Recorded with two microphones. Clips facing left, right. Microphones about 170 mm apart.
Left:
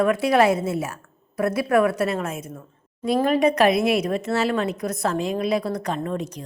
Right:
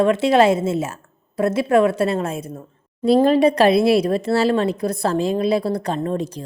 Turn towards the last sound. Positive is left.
turn(degrees=-30)  # may be behind; listen again after turning